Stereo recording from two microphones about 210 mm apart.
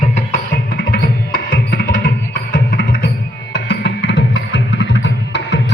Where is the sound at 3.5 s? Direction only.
50° left (ahead or behind).